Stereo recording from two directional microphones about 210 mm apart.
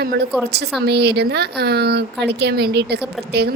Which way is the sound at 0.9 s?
50° right (ahead or behind).